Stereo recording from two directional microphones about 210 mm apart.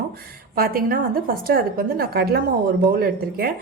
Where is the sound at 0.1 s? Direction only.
45° right (ahead or behind).